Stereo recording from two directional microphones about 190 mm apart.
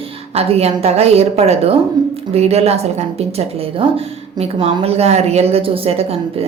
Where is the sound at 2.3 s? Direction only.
35° right (ahead or behind).